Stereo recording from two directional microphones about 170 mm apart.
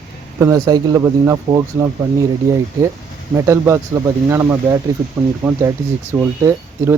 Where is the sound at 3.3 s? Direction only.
15° right (ahead or behind).